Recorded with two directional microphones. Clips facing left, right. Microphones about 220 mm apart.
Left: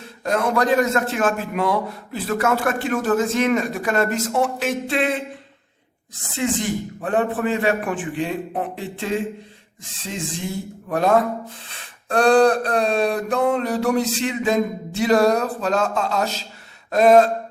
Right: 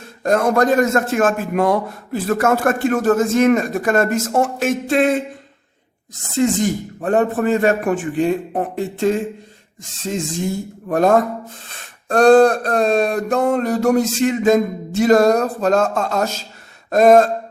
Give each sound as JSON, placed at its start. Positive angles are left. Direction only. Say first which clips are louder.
{"t": 0.2, "sound": "a man's voice", "louder": "right 5 dB", "side_deg": -45}
{"t": 6.3, "sound": "a man's voice", "louder": "right 6 dB", "side_deg": -45}